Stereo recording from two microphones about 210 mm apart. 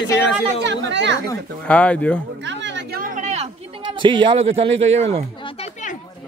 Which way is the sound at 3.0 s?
35° right (ahead or behind).